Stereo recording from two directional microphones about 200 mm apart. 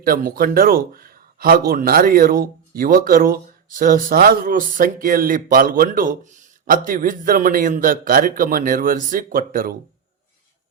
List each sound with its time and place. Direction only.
0.0 s speech: 45° right (ahead or behind)